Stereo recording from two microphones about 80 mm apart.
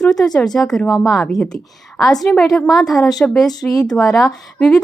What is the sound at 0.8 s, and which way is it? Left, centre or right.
Speech, left.